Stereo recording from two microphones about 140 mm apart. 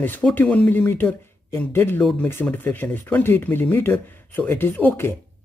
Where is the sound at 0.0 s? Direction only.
10° left (ahead or behind).